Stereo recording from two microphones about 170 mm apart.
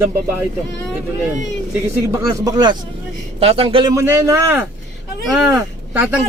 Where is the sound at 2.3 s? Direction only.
20° right (ahead or behind).